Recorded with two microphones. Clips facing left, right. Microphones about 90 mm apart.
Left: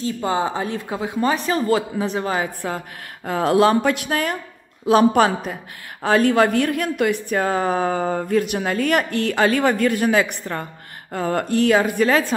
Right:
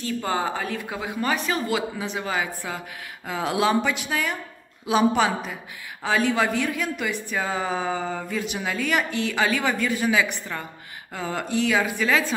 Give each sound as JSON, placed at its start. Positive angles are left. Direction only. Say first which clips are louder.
{"t": 0.0, "sound": "speech", "louder": "left 4 dB", "side_deg": 25}